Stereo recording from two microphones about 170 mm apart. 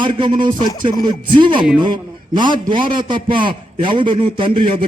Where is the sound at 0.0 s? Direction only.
30° right (ahead or behind).